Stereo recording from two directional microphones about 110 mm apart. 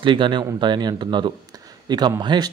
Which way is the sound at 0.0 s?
50° right (ahead or behind).